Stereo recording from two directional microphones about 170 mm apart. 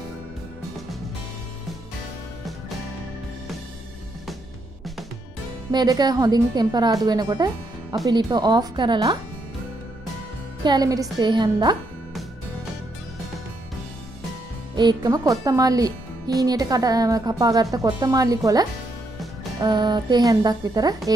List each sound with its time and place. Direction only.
5.7 s speech: 25° right (ahead or behind)
10.6 s speech: 25° right (ahead or behind)
14.8 s speech: 25° right (ahead or behind)